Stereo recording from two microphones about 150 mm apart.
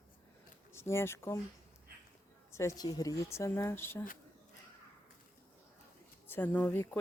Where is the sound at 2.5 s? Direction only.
20° left (ahead or behind).